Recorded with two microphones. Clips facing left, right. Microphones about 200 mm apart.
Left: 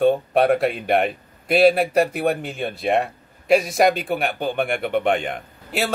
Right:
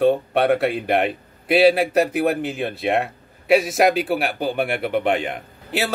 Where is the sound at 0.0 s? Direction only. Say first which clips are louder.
Even; centre (ahead or behind).